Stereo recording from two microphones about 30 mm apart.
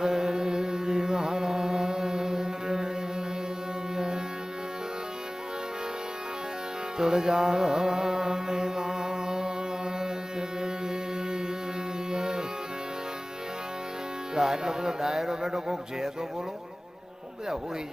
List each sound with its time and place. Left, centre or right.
0.0 s carnatic music: centre
3.9 s music: right
7.0 s music: right
12.1 s music: right
14.3 s speech: centre